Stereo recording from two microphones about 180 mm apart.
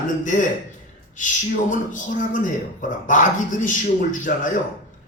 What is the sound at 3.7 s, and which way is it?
Speech, 45° left (ahead or behind).